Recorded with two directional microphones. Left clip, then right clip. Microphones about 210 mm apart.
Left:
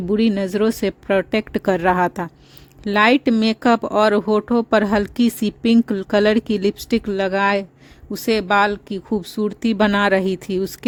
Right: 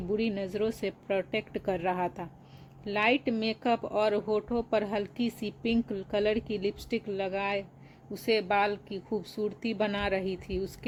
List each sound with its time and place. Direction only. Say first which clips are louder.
0.1 s speech: left 12 dB; 50° left (ahead or behind)